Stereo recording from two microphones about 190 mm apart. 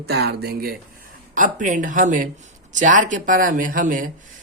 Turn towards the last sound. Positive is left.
turn(degrees=-45)  # may be behind; listen again after turning